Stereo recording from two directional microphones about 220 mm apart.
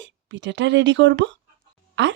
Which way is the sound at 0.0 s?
55° right (ahead or behind).